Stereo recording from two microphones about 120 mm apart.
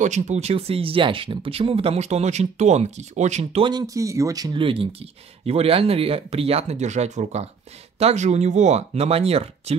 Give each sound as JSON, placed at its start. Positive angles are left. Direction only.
{"t": 0.0, "sound": "speech", "side_deg": -80}
{"t": 3.6, "sound": "speech", "side_deg": -30}
{"t": 4.6, "sound": "speech", "side_deg": -50}